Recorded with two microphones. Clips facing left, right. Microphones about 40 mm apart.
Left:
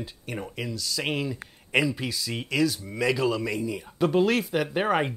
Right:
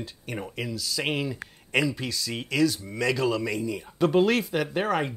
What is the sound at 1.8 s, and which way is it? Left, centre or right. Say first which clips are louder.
Speech: even; centre.